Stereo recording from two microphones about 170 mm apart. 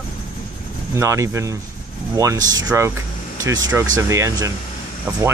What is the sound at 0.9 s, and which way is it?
Speech, 15° right (ahead or behind).